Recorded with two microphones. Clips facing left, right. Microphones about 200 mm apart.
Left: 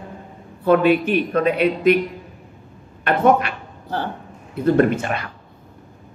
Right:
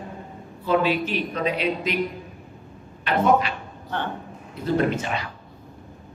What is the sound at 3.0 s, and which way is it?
Speech, 55° left (ahead or behind).